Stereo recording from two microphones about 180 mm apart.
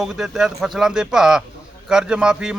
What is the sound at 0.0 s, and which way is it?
A man's voice, centre (ahead or behind).